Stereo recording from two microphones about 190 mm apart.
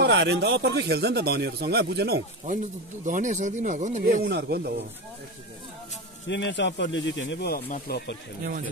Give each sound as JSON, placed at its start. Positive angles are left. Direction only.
{"t": 0.0, "sound": "speech", "side_deg": -65}
{"t": 3.1, "sound": "speech", "side_deg": -40}
{"t": 6.2, "sound": "speech", "side_deg": 70}